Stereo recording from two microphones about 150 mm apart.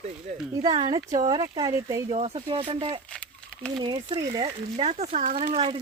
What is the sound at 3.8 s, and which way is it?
Speech, 30° right (ahead or behind).